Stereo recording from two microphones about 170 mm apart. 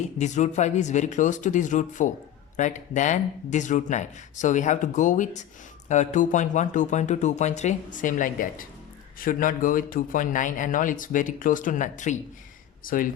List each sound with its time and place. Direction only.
0.2 s speech: 45° left (ahead or behind)